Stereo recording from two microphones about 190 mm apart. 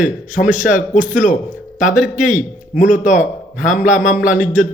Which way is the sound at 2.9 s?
40° left (ahead or behind).